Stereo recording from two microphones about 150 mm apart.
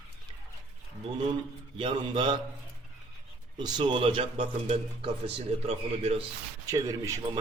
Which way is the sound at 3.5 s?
25° right (ahead or behind).